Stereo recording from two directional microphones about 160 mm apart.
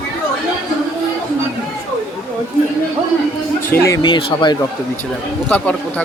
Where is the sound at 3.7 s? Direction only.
15° left (ahead or behind).